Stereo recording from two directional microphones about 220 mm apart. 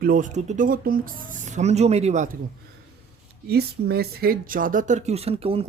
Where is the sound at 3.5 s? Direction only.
45° right (ahead or behind); by 5.6 s 25° right (ahead or behind).